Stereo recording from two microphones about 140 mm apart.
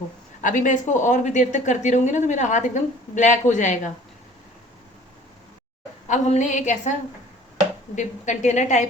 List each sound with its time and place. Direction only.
0.4 s speech: 65° left (ahead or behind)
6.1 s speech: 55° left (ahead or behind)
7.9 s speech: 60° left (ahead or behind)